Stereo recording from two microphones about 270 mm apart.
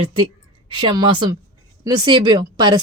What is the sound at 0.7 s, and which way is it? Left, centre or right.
Speech, centre.